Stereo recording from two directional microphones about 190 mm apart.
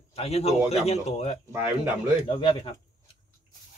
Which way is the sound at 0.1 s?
30° left (ahead or behind).